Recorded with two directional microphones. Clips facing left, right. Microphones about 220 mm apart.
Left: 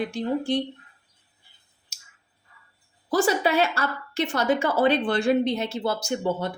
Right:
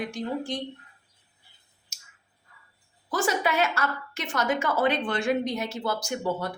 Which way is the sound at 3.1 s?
30° left (ahead or behind).